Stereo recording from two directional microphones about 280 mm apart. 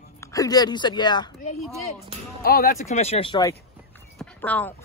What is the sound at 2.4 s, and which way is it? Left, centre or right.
Speech, left.